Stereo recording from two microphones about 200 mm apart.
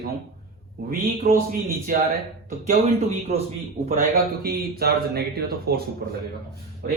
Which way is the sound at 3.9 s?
50° right (ahead or behind).